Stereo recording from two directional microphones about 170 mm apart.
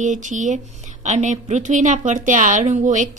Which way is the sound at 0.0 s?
45° right (ahead or behind).